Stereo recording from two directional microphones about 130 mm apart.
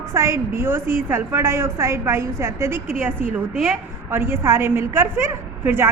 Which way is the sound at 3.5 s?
Centre (ahead or behind).